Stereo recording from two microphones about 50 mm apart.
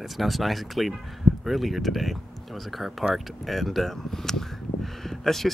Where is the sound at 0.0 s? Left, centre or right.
Centre.